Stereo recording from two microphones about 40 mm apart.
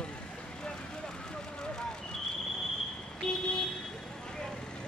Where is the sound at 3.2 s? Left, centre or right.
Left.